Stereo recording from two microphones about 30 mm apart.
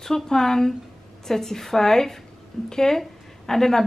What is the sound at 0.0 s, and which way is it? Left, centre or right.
Speech, centre.